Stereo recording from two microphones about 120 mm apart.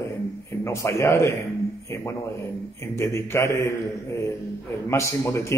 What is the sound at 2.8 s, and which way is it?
Speech, 20° left (ahead or behind).